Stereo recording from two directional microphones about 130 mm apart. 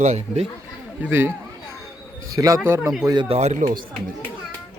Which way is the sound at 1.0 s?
15° right (ahead or behind).